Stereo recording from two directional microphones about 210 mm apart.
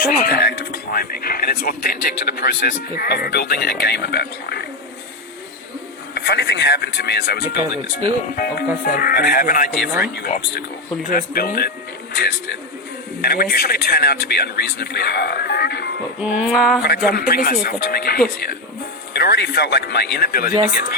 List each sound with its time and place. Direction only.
0.0 s speech: 50° left (ahead or behind)
6.1 s speech: 50° left (ahead or behind)
16.2 s a sound: 5° right (ahead or behind)
16.8 s speech: 50° left (ahead or behind)